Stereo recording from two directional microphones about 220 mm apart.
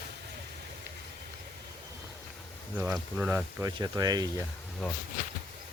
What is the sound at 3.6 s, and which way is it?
Speech, 15° right (ahead or behind).